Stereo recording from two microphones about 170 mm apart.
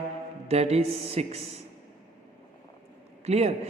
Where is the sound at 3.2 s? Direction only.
40° right (ahead or behind).